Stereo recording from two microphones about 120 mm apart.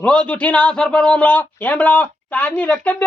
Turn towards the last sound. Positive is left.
turn(degrees=15)  # may be behind; listen again after turning